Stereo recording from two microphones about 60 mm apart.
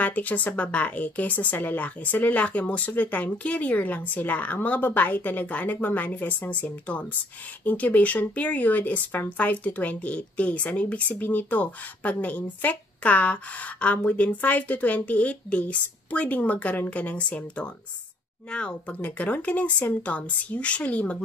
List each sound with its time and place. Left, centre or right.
0.0 s speech: left